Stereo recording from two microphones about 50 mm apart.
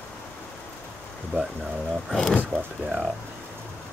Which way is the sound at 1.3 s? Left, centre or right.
Right.